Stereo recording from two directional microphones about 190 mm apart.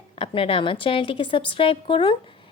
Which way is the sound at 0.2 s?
25° left (ahead or behind).